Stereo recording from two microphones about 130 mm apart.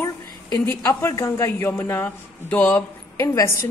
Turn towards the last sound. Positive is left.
turn(degrees=20)  # may be behind; listen again after turning